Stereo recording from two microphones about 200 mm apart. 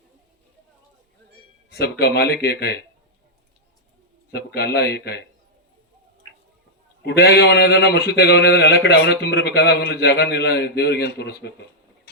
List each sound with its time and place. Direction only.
1.7 s a man's voice: 55° left (ahead or behind)
4.3 s a man's voice: 60° left (ahead or behind)
7.0 s a man's voice: 55° left (ahead or behind)